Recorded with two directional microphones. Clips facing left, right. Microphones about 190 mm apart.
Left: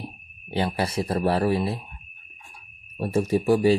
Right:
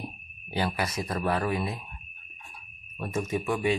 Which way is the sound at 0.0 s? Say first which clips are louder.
Left 1 dB; 25° left (ahead or behind).